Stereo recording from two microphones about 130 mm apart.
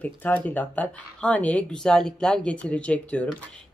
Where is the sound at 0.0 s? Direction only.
10° left (ahead or behind).